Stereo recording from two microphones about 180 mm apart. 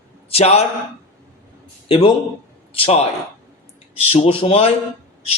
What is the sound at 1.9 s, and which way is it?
A man's voice, 30° left (ahead or behind).